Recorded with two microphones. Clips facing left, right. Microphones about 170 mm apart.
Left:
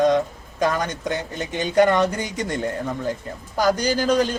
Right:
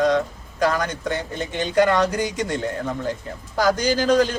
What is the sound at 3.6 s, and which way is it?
Speech, 15° left (ahead or behind).